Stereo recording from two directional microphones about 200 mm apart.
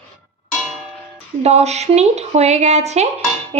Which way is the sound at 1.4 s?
35° right (ahead or behind).